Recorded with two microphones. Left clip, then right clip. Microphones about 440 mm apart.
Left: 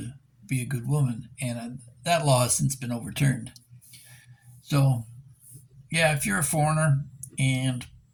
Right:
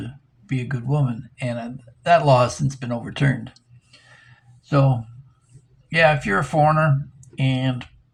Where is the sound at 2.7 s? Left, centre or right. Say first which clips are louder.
Right 5 dB; left.